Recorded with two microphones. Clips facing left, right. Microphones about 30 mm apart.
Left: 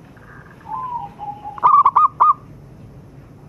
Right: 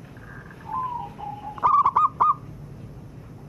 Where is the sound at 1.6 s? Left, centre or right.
Left.